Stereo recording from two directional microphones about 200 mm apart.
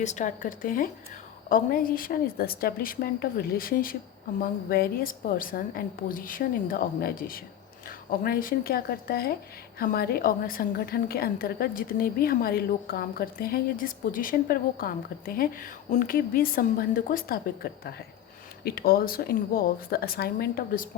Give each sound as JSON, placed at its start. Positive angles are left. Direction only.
{"t": 0.0, "sound": "a woman's voice", "side_deg": 35}